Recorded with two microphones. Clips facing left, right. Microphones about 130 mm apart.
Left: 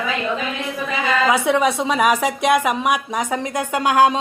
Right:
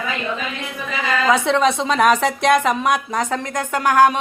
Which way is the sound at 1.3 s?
10° left (ahead or behind).